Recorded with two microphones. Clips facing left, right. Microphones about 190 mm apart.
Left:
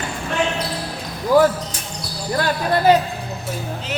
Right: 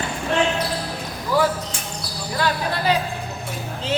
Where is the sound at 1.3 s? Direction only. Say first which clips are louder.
Left 6 dB; 45° left (ahead or behind).